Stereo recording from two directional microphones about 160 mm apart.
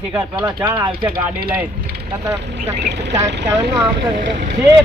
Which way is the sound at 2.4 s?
90° right.